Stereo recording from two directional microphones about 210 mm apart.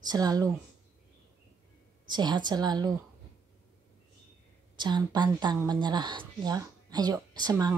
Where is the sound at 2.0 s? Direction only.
20° right (ahead or behind).